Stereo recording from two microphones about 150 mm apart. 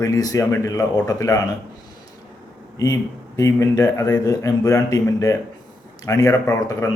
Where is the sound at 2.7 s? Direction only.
20° left (ahead or behind).